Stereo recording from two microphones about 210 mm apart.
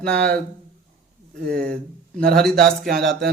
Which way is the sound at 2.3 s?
Centre (ahead or behind).